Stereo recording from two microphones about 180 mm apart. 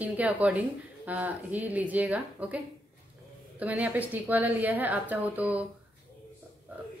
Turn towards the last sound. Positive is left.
turn(degrees=-10)  # may be behind; listen again after turning